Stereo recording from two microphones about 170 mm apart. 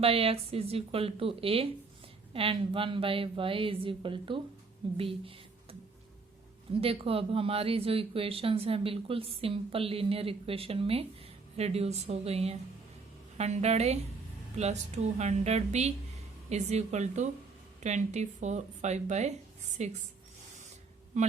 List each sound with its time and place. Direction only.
0.0 s speech: 35° right (ahead or behind)
6.8 s speech: 35° right (ahead or behind)
21.1 s speech: 45° right (ahead or behind)